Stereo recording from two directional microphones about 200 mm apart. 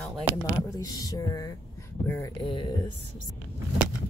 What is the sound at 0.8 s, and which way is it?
Speech, 20° left (ahead or behind).